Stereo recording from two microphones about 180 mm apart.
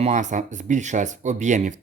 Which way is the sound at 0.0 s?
40° right (ahead or behind).